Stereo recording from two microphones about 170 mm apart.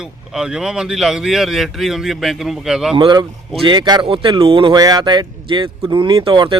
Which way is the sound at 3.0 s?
30° right (ahead or behind).